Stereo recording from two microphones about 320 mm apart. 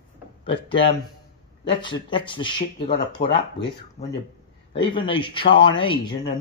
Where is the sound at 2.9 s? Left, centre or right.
Left.